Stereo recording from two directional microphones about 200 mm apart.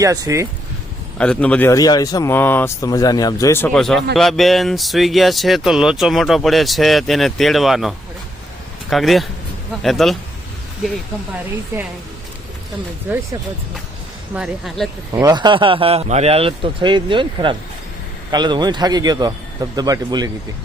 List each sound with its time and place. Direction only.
0.0 s speech: 15° right (ahead or behind)
1.2 s speech: 5° left (ahead or behind)
3.7 s speech: centre (ahead or behind)
14.3 s speech: centre (ahead or behind)
15.1 s a man's voice: 20° right (ahead or behind)